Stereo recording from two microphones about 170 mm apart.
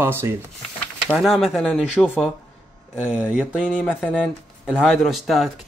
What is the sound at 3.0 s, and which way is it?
Speech, 5° right (ahead or behind).